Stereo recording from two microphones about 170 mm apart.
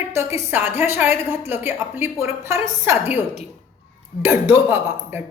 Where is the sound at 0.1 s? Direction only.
15° right (ahead or behind).